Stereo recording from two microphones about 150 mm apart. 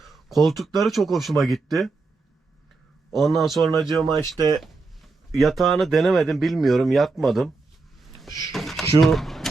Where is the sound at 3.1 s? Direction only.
Centre (ahead or behind).